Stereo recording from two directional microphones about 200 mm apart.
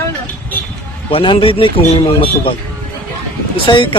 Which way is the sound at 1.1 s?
25° left (ahead or behind).